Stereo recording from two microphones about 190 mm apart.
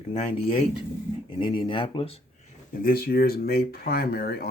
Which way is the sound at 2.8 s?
50° left (ahead or behind).